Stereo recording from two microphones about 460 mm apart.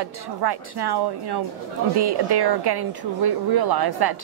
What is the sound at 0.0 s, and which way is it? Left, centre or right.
A woman's voice, right.